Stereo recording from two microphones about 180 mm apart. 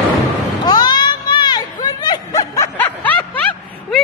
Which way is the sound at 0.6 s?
25° left (ahead or behind).